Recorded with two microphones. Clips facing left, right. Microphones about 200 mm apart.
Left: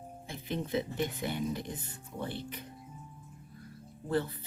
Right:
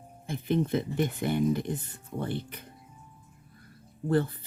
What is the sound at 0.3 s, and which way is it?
Speech, 50° right (ahead or behind).